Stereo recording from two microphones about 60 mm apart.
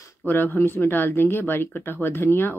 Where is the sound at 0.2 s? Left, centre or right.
Left.